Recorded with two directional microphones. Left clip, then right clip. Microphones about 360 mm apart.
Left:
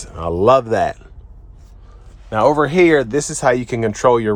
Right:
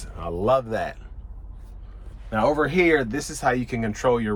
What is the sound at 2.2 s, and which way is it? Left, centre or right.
Speech, centre.